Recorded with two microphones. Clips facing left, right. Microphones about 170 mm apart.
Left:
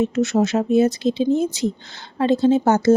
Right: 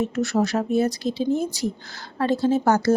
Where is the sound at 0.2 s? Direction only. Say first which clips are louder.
Left 2 dB; 20° left (ahead or behind).